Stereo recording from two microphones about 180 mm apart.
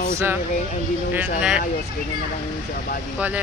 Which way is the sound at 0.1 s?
10° right (ahead or behind).